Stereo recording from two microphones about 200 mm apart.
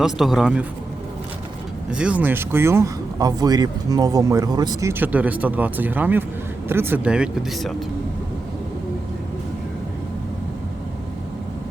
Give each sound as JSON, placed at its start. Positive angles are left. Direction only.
{"t": 0.0, "sound": "speech", "side_deg": 0}
{"t": 1.9, "sound": "speech", "side_deg": -5}